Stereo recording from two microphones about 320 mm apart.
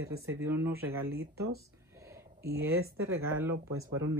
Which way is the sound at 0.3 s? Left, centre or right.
Centre.